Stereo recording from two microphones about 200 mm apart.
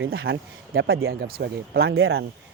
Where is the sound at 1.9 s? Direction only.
90° right.